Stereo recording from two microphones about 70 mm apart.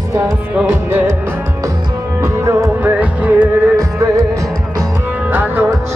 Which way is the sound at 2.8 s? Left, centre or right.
Right.